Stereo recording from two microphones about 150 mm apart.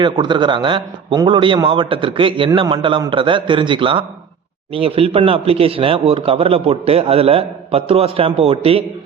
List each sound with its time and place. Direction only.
0.0 s speech: 30° right (ahead or behind)